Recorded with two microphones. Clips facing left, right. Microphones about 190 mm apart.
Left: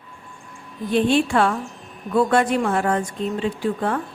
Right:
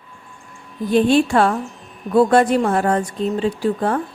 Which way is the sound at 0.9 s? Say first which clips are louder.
Right 4 dB; 40° right (ahead or behind).